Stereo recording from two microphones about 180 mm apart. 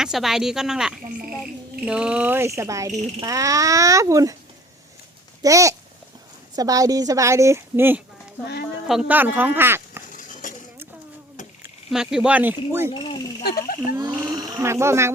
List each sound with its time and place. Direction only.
0.0 s a woman's voice: centre (ahead or behind); by 4.4 s 20° right (ahead or behind)
5.4 s a woman's voice: 20° right (ahead or behind)
10.1 s a sound: 45° left (ahead or behind)
11.9 s a woman's voice: 5° right (ahead or behind)
12.9 s speech: 25° left (ahead or behind)
13.4 s speech: 60° left (ahead or behind)
13.8 s speech: 20° right (ahead or behind)